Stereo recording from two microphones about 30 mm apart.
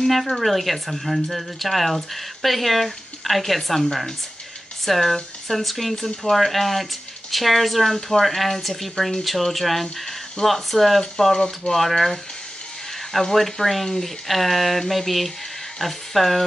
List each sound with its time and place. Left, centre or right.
0.0 s speech: centre
11.3 s speech: left
11.7 s speech: centre
13.3 s speech: centre